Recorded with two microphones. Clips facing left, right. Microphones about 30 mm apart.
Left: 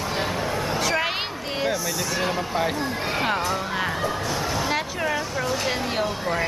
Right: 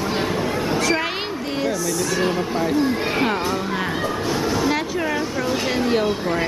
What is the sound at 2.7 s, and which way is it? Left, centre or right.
Chatter, centre.